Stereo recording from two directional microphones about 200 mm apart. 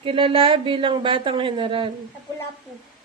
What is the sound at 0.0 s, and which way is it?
Speech, 25° right (ahead or behind).